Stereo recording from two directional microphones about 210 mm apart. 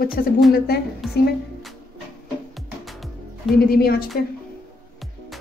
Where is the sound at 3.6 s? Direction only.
45° left (ahead or behind).